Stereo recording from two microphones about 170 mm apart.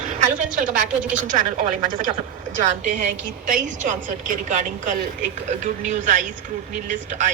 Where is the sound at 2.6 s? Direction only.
45° right (ahead or behind).